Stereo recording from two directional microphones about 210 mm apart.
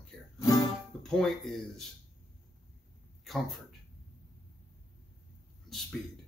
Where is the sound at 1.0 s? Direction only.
Centre (ahead or behind).